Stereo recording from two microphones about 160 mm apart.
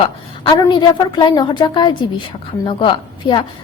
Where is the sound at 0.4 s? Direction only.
25° left (ahead or behind).